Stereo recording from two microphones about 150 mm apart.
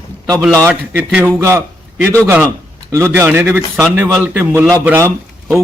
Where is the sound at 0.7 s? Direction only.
10° right (ahead or behind).